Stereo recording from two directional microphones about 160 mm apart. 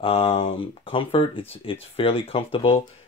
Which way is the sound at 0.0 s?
35° left (ahead or behind).